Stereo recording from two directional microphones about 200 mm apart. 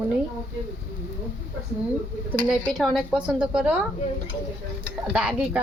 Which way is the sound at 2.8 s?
Centre (ahead or behind).